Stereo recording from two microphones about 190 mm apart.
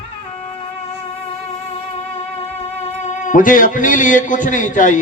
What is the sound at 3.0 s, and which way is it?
A man's voice, 40° left (ahead or behind).